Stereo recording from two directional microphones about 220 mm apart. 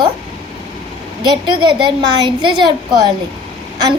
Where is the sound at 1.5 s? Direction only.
20° right (ahead or behind).